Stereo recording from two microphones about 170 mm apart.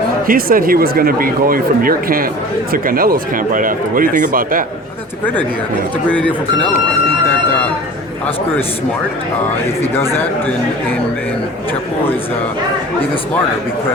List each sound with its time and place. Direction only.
0.3 s speech: 60° right (ahead or behind)
6.1 s speech: 10° left (ahead or behind)
10.0 s speech: 15° left (ahead or behind)